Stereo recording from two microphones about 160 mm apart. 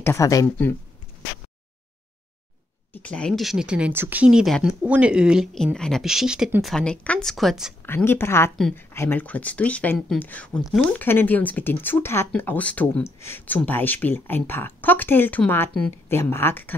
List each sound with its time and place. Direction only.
0.0 s speech: 15° left (ahead or behind)
2.9 s speech: 10° left (ahead or behind)
7.8 s speech: 15° left (ahead or behind)